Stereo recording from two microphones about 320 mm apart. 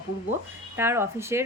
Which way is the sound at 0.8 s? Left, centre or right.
Centre.